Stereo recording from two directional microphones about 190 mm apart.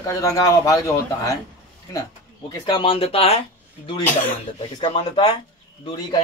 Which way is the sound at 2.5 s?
25° left (ahead or behind).